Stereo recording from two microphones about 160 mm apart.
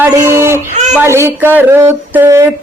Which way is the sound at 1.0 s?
15° right (ahead or behind).